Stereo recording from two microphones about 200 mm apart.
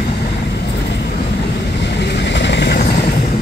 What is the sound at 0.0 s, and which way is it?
Vehicle, 55° left (ahead or behind).